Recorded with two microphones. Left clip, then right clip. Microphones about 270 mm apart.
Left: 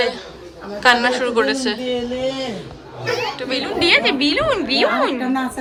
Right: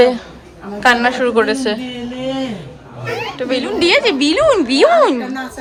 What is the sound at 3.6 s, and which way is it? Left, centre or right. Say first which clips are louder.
A woman's voice: right 2 dB; centre.